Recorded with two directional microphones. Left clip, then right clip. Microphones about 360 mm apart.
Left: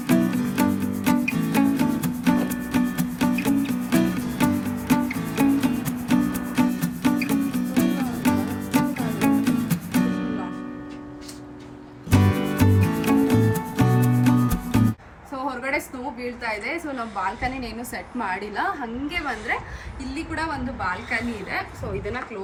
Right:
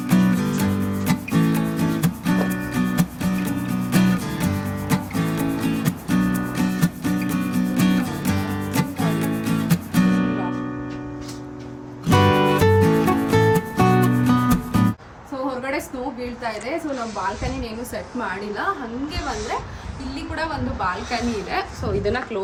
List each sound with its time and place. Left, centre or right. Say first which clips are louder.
0.0 s music: right 1 dB; centre
12.0 s music: right 7 dB; centre